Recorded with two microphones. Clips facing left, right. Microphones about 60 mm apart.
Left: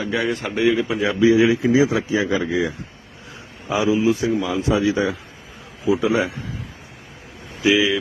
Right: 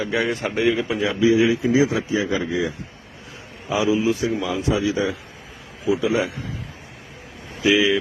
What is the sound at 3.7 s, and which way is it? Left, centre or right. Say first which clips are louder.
Speech: left 2 dB; centre.